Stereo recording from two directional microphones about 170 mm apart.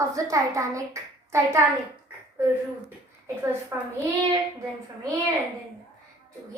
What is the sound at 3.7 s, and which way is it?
Speech, 15° right (ahead or behind).